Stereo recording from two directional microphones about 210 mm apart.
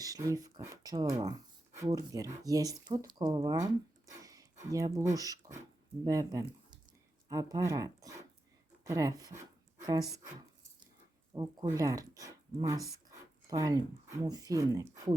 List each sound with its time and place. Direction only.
0.0 s speech: 15° right (ahead or behind)
4.0 s a sound: 15° right (ahead or behind)
5.1 s speech: 15° right (ahead or behind)
11.3 s speech: 15° right (ahead or behind)